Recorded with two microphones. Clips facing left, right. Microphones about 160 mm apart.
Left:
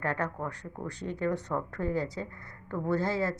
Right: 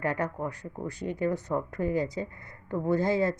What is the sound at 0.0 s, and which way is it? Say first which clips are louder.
A woman's voice: right 2 dB; 10° right (ahead or behind).